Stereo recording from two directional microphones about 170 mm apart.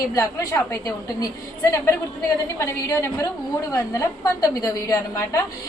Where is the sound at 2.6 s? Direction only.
15° left (ahead or behind).